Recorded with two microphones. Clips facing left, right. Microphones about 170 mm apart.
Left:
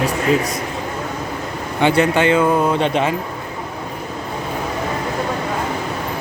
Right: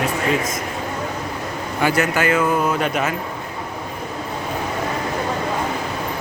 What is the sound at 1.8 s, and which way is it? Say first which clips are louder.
Speech: left 4 dB; 30° left (ahead or behind).